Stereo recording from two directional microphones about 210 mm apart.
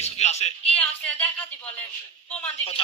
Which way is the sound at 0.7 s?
5° left (ahead or behind).